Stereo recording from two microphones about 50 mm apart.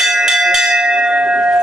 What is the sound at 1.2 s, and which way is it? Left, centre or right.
Bell, right.